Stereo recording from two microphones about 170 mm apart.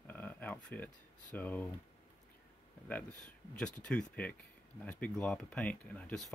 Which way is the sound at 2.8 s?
5° left (ahead or behind).